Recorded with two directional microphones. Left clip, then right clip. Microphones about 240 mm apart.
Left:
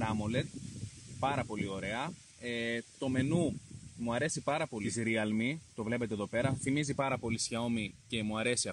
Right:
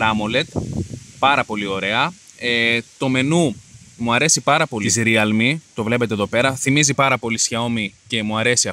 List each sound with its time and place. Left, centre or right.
0.0 s speech: right